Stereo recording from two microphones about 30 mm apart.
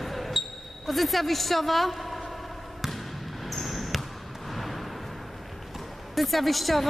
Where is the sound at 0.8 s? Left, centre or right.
Centre.